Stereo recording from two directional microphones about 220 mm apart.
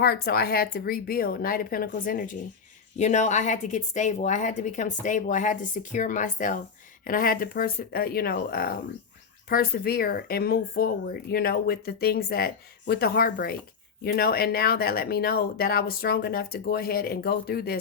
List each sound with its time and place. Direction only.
0.0 s a woman's voice: 45° left (ahead or behind)